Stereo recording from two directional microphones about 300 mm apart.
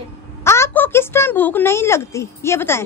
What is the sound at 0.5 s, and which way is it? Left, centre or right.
Speech, centre.